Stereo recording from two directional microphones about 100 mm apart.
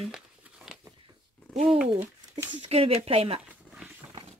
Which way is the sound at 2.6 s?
80° right.